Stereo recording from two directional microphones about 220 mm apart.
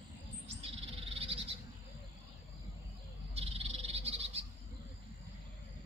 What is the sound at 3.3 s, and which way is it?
Frog, 25° right (ahead or behind).